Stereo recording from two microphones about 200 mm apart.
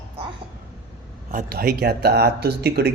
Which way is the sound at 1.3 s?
50° right (ahead or behind).